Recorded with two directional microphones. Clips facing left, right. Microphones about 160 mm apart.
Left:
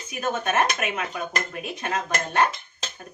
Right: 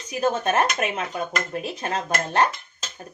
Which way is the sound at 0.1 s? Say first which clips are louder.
Right 3 dB; 35° right (ahead or behind).